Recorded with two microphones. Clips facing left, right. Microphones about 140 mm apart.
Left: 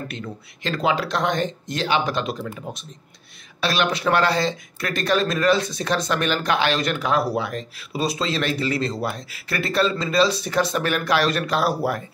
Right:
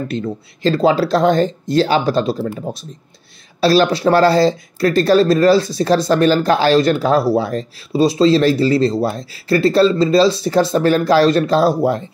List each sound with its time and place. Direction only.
0.1 s speech: 35° right (ahead or behind)